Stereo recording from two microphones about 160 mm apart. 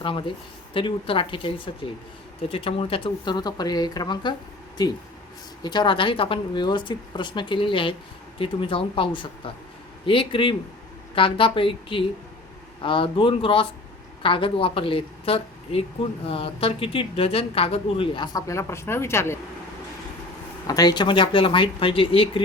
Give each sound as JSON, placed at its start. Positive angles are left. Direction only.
{"t": 0.0, "sound": "a woman's voice", "side_deg": 30}
{"t": 5.6, "sound": "a woman's voice", "side_deg": 30}
{"t": 20.7, "sound": "speech", "side_deg": 25}